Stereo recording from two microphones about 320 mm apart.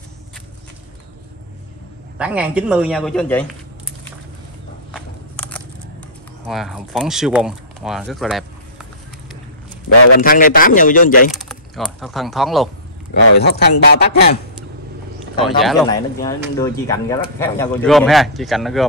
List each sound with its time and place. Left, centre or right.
2.1 s speech: centre
4.9 s a sound: centre
6.4 s speech: centre
9.8 s a man's voice: left
10.1 s a man's voice: left
11.3 s speech: centre
13.4 s speech: left
15.4 s speech: centre
15.9 s speech: centre